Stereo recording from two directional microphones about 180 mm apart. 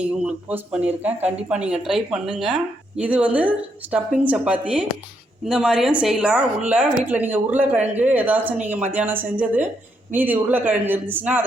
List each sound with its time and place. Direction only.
0.0 s speech: 5° right (ahead or behind)